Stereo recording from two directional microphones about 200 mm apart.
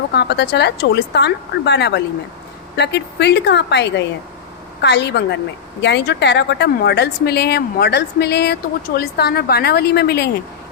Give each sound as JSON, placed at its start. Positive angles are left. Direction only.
{"t": 0.1, "sound": "a woman's voice", "side_deg": 55}